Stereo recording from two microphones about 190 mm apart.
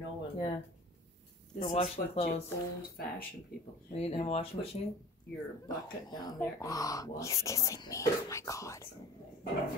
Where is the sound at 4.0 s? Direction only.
35° left (ahead or behind).